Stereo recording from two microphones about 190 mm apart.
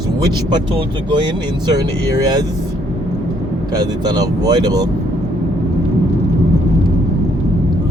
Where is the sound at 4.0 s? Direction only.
20° right (ahead or behind).